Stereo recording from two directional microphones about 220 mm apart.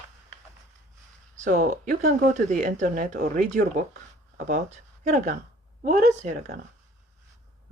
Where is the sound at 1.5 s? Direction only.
40° right (ahead or behind).